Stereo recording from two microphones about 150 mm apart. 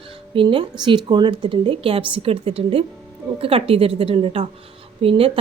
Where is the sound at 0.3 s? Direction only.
30° right (ahead or behind).